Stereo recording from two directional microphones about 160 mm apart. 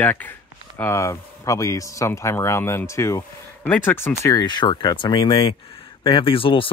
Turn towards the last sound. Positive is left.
turn(degrees=35)  # may be behind; listen again after turning